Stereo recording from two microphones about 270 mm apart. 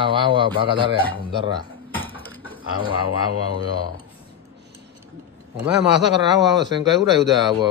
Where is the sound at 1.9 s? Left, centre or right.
Centre.